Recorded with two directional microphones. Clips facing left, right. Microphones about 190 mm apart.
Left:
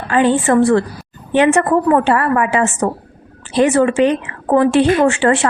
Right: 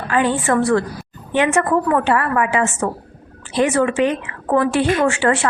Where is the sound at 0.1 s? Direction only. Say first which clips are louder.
Left 5 dB; 30° left (ahead or behind).